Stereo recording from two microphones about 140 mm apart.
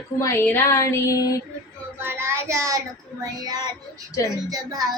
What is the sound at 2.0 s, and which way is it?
Child singing, 15° right (ahead or behind).